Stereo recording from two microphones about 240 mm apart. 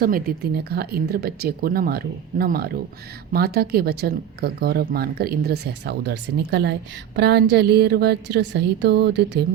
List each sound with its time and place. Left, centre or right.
0.0 s a woman's voice: right